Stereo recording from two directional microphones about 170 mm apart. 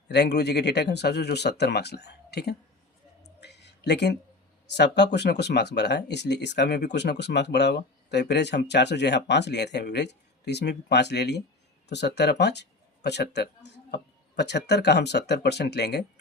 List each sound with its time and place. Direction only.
0.1 s speech: 80° left
3.2 s a sound: 80° left
4.7 s speech: 85° left